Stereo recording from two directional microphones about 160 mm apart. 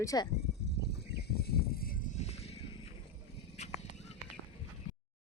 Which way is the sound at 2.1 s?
40° left (ahead or behind).